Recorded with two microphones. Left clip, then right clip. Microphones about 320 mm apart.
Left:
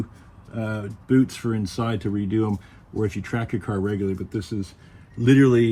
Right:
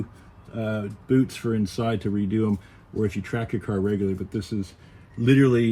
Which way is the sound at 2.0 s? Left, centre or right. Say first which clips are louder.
Left 1 dB; centre.